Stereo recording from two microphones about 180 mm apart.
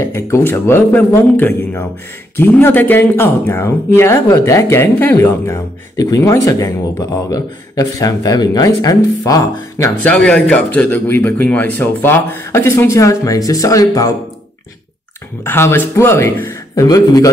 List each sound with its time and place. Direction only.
0.0 s speech: 15° left (ahead or behind)
15.4 s speech: 10° left (ahead or behind)